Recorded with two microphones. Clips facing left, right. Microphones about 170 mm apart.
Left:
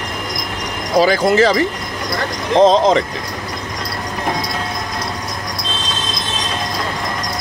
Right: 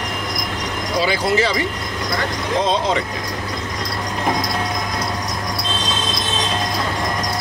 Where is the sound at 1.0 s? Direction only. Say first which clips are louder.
Left 6 dB; 45° left (ahead or behind).